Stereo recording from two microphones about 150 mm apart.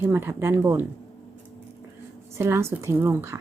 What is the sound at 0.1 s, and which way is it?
Speech, 15° right (ahead or behind).